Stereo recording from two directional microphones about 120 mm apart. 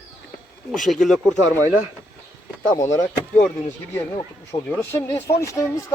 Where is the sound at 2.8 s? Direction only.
25° left (ahead or behind).